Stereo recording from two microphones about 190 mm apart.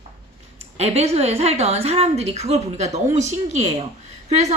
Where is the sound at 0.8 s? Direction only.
35° right (ahead or behind).